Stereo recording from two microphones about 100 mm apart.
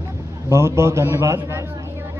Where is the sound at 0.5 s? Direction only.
25° right (ahead or behind).